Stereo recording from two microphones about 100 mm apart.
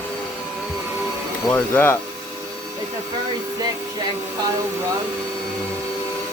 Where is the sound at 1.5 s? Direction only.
20° left (ahead or behind).